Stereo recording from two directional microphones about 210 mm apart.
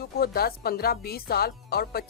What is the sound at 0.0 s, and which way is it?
Speech, 45° left (ahead or behind).